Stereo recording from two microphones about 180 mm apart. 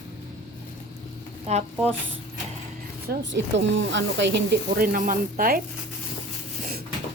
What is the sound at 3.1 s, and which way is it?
Speech, 55° right (ahead or behind).